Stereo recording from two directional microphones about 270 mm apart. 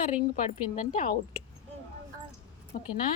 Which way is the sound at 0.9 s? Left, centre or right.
Left.